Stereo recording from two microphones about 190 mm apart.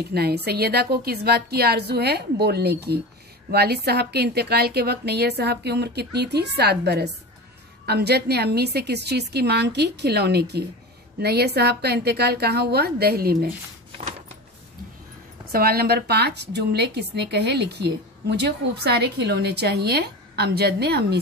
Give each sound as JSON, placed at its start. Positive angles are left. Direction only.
{"t": 0.1, "sound": "a woman's voice", "side_deg": -55}
{"t": 15.5, "sound": "a woman's voice", "side_deg": -55}